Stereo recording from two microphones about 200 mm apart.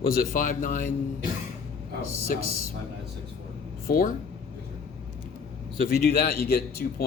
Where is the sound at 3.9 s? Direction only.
45° left (ahead or behind).